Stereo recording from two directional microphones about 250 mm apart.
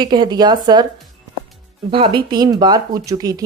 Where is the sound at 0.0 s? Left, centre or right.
Centre.